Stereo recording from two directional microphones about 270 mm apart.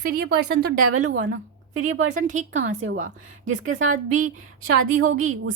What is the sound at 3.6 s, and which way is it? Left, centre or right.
A woman's voice, right.